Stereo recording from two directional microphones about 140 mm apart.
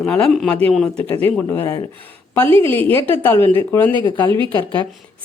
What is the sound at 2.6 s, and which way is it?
A woman's voice, 15° left (ahead or behind).